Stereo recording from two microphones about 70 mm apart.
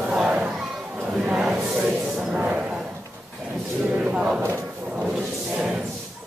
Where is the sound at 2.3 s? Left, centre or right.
Centre.